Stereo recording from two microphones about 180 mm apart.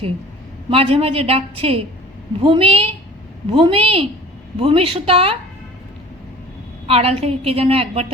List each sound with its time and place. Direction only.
0.7 s a woman's voice: 30° right (ahead or behind)
6.8 s a woman's voice: 35° right (ahead or behind)